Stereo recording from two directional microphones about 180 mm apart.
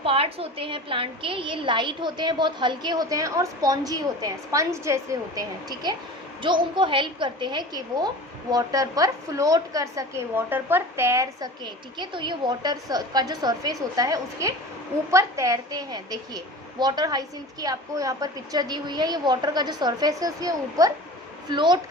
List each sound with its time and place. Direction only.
0.0 s a woman's voice: 30° right (ahead or behind)